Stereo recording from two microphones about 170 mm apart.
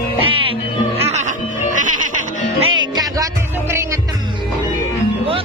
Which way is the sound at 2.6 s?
30° right (ahead or behind).